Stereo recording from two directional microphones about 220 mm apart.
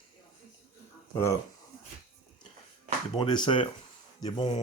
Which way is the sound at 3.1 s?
20° left (ahead or behind).